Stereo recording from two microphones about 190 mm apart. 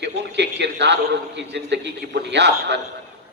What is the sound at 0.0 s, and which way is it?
A man's voice, 65° right (ahead or behind).